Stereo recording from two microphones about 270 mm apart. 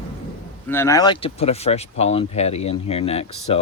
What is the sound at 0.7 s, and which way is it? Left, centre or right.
Speech, centre.